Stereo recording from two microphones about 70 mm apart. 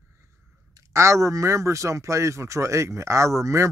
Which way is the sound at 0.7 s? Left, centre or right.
Right.